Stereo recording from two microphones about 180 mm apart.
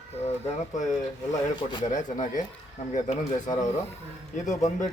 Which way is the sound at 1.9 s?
45° left (ahead or behind).